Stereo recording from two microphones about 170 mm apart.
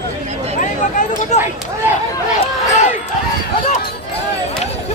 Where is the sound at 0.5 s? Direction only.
50° left (ahead or behind).